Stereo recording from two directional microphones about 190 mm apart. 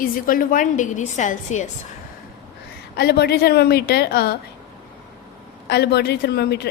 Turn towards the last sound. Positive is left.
turn(degrees=60)  # may be behind; listen again after turning